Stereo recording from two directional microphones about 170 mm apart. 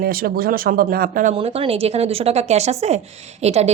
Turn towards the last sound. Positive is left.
turn(degrees=-40)  # may be behind; listen again after turning